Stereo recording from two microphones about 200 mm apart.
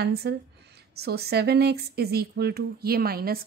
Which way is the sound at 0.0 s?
55° right (ahead or behind).